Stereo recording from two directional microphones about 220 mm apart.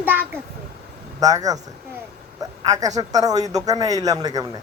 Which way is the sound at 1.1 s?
15° right (ahead or behind).